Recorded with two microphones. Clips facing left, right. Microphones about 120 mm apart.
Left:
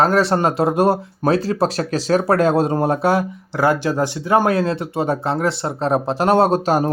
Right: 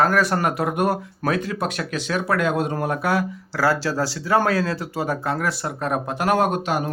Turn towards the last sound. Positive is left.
turn(degrees=40)  # may be behind; listen again after turning